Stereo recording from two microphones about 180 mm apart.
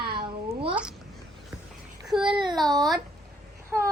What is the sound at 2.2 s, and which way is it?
Speech, 25° right (ahead or behind).